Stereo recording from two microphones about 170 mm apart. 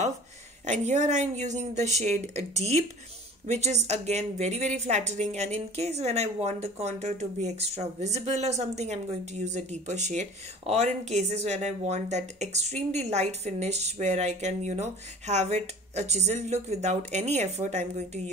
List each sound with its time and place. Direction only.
0.7 s speech: 45° right (ahead or behind)